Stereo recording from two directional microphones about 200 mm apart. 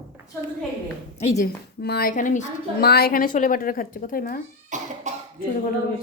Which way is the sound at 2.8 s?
50° left (ahead or behind).